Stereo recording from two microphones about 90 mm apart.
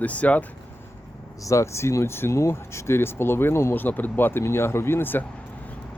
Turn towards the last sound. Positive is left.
turn(degrees=25)  # may be behind; listen again after turning